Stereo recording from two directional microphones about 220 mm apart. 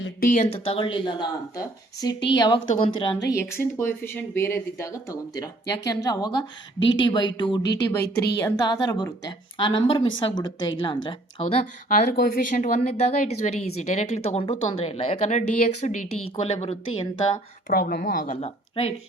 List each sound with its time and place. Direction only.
0.2 s speech: 35° left (ahead or behind)
3.2 s speech: 10° left (ahead or behind)
6.7 s speech: 60° left (ahead or behind)
7.0 s speech: 20° left (ahead or behind)
7.6 s speech: 50° left (ahead or behind)
8.4 s a woman's voice: 15° left (ahead or behind)
17.7 s a woman's voice: 40° left (ahead or behind)